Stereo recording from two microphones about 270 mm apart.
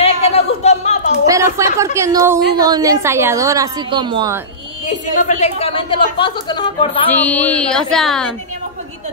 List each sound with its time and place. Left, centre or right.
0.0 s a sound: left
1.3 s a woman's voice: centre
4.8 s a woman's voice: left
7.1 s speech: centre